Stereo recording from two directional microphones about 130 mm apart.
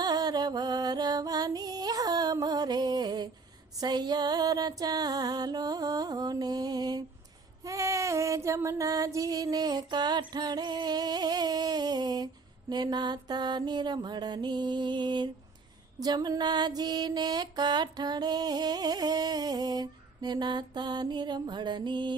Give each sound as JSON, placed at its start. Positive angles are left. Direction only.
{"t": 0.0, "sound": "music", "side_deg": -30}
{"t": 12.7, "sound": "mantra", "side_deg": -35}